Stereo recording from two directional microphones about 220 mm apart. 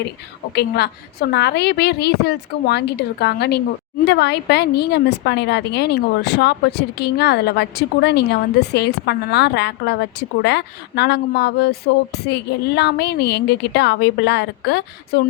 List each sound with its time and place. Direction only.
0.5 s a woman's voice: 50° left (ahead or behind)